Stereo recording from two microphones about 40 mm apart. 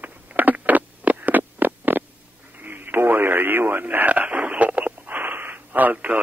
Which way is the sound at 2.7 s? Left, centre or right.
Right.